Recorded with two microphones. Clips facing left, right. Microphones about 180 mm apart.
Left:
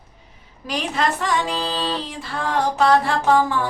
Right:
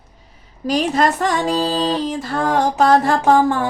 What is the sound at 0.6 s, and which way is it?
Music, 40° right (ahead or behind).